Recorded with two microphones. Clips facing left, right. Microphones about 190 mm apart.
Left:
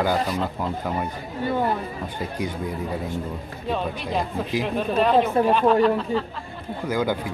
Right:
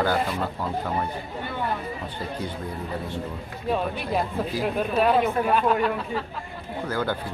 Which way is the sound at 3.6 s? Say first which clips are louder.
Right 1 dB; 10° right (ahead or behind).